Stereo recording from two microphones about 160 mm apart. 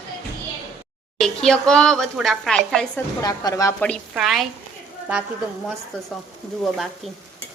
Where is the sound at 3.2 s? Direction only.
25° left (ahead or behind).